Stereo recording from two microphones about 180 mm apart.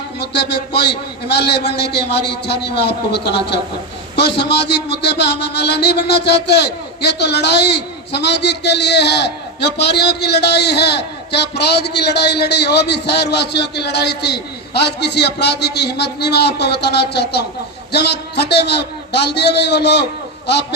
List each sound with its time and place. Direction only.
0.2 s a man's voice: 65° left (ahead or behind)